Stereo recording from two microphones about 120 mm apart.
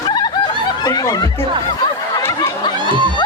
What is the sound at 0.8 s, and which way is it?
Snicker, 30° left (ahead or behind).